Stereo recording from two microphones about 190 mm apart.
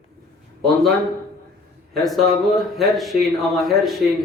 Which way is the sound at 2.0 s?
Centre (ahead or behind).